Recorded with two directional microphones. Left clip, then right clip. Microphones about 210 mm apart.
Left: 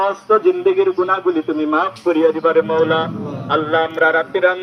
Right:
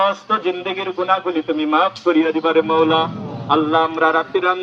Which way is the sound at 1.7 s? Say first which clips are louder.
Right 2 dB; 40° right (ahead or behind).